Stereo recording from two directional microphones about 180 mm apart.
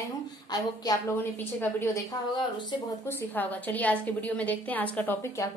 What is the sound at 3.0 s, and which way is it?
A woman's voice, 10° left (ahead or behind).